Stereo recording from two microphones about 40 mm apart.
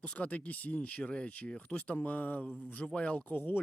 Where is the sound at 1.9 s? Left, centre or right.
Left.